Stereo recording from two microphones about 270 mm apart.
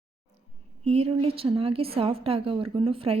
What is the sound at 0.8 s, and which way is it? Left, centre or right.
Speech, right.